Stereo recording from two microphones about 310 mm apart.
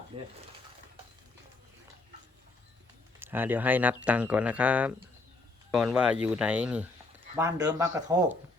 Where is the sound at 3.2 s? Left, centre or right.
Centre.